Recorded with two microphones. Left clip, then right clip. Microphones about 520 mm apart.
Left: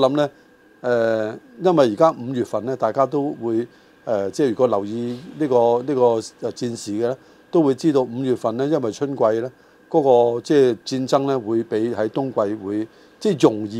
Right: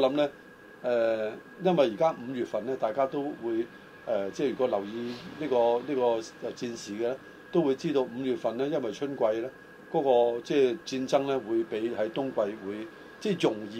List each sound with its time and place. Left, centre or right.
0.0 s speech: left